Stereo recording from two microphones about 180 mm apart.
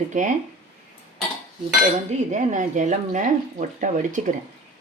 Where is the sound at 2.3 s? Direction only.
45° right (ahead or behind).